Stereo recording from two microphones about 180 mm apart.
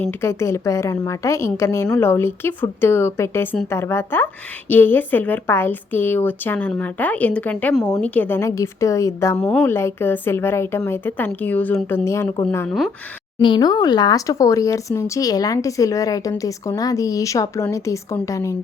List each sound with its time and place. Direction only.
0.0 s a woman's voice: 10° left (ahead or behind)
9.4 s a woman's voice: 5° left (ahead or behind)
13.4 s a woman's voice: 25° left (ahead or behind)